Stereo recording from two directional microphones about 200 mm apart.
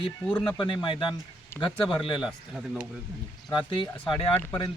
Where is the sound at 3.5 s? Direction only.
25° left (ahead or behind).